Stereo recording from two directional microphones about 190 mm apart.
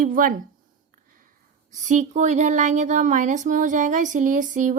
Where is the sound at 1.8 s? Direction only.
40° right (ahead or behind).